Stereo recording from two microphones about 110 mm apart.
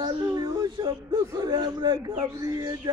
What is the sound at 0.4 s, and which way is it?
A man's voice, 50° right (ahead or behind).